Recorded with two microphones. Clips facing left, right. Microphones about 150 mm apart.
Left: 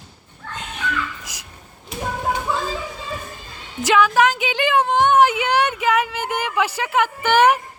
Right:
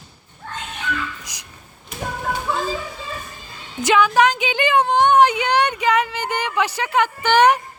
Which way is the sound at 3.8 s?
Centre (ahead or behind).